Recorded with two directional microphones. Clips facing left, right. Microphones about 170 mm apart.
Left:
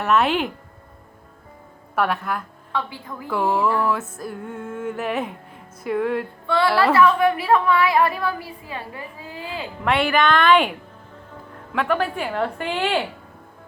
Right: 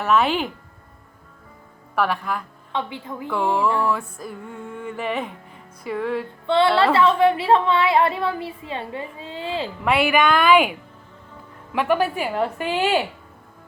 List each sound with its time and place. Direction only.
0.0 s music: centre (ahead or behind)
2.0 s music: centre (ahead or behind)
2.7 s a woman's voice: 20° right (ahead or behind)
3.2 s speech: 5° left (ahead or behind)
3.8 s music: 5° left (ahead or behind)
6.5 s a woman's voice: 25° right (ahead or behind)
9.8 s a woman's voice: 5° right (ahead or behind)